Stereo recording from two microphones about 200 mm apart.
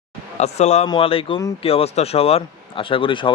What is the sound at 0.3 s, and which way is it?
Speech, 35° left (ahead or behind).